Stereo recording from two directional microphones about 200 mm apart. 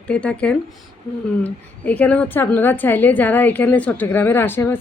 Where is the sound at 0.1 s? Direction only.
5° left (ahead or behind).